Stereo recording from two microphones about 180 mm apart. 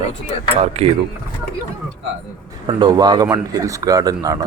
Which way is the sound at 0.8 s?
35° right (ahead or behind).